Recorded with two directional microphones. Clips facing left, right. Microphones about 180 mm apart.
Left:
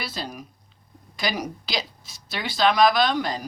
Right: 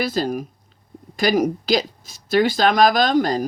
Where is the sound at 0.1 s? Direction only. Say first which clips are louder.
Right 12 dB; 50° right (ahead or behind).